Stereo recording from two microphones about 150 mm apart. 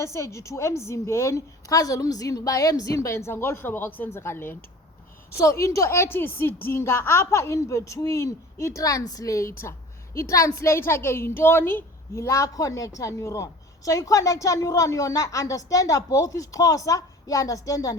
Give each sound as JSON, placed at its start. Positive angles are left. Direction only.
{"t": 0.0, "sound": "a woman's voice", "side_deg": 20}